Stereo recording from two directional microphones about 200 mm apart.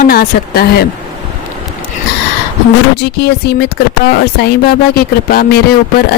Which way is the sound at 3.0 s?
55° left (ahead or behind).